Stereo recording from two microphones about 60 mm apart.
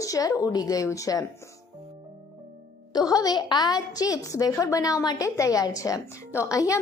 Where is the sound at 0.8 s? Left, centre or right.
Left.